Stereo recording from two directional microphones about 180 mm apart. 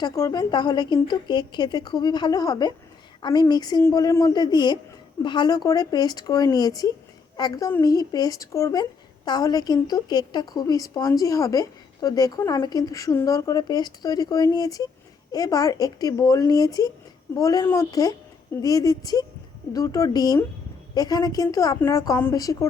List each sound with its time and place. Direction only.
0.0 s speech: 20° left (ahead or behind)